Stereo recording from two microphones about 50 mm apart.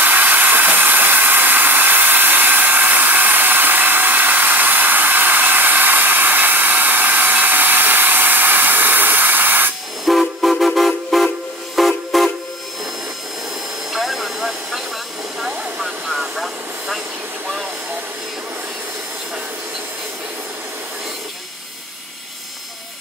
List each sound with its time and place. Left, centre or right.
0.0 s a sound: right
10.0 s train: centre
13.9 s vehicle: centre